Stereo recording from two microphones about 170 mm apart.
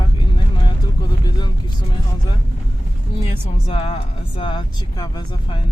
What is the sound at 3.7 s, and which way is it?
A woman's voice, 35° left (ahead or behind).